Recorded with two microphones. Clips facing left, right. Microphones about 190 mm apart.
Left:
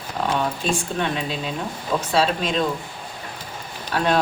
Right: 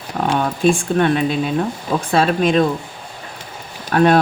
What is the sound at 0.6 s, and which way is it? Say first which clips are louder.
Speech: right 9 dB; 55° right (ahead or behind).